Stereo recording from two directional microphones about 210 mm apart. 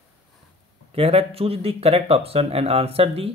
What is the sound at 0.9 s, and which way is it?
Speech, 30° right (ahead or behind).